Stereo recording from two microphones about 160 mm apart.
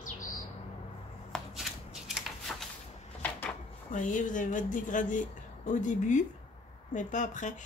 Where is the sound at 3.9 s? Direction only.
50° left (ahead or behind).